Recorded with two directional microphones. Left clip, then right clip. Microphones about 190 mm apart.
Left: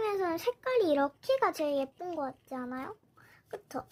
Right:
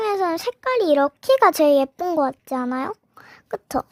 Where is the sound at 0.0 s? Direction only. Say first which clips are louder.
Right 9 dB; 45° right (ahead or behind).